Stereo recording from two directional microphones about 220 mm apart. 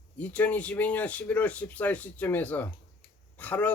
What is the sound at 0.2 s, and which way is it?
Speech, 5° left (ahead or behind).